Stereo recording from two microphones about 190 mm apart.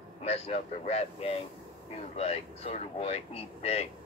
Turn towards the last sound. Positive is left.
turn(degrees=30)  # may be behind; listen again after turning